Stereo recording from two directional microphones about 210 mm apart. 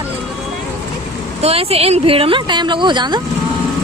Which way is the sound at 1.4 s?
30° right (ahead or behind).